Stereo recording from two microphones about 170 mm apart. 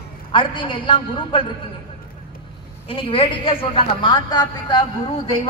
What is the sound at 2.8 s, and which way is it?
A man's voice, 30° left (ahead or behind).